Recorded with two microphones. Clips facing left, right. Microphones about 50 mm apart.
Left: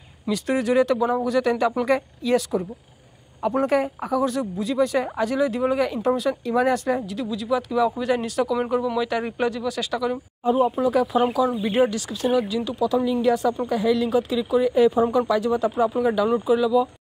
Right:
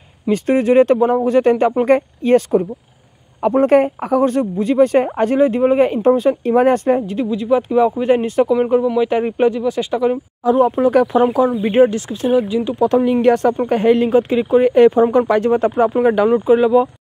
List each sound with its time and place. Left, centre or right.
0.3 s speech: right
3.6 s speech: right
10.4 s speech: right
10.8 s speech: right
11.6 s speech: right
12.8 s speech: right
16.3 s speech: right